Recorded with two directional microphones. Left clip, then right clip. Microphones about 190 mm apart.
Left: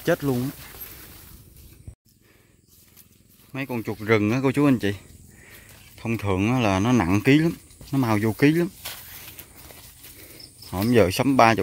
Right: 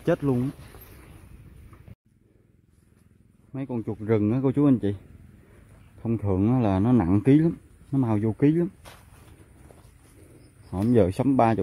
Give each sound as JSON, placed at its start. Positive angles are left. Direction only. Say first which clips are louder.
{"t": 0.0, "sound": "speech", "louder": "left 1 dB", "side_deg": 0}
{"t": 3.5, "sound": "speech", "louder": "left 3 dB", "side_deg": 0}
{"t": 6.0, "sound": "speech", "louder": "left 1 dB", "side_deg": 0}
{"t": 7.9, "sound": "speech", "louder": "left 3 dB", "side_deg": 5}
{"t": 10.7, "sound": "speech", "louder": "left 3 dB", "side_deg": 0}